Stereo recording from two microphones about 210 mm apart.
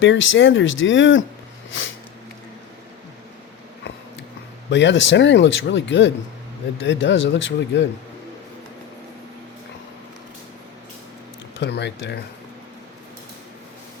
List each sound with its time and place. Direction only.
0.0 s speech: 65° left (ahead or behind)
4.7 s speech: 60° left (ahead or behind)
11.6 s speech: 55° left (ahead or behind)